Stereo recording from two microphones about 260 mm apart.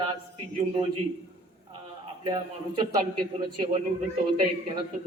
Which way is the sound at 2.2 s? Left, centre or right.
Centre.